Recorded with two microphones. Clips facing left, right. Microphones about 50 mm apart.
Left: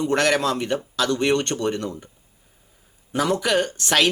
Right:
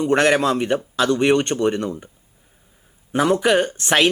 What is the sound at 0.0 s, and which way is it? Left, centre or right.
Speech, right.